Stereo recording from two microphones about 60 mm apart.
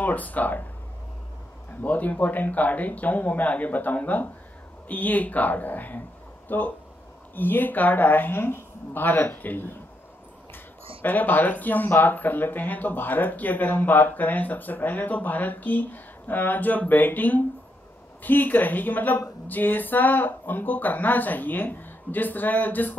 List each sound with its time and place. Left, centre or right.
0.0 s speech: left
1.8 s speech: left
11.1 s speech: left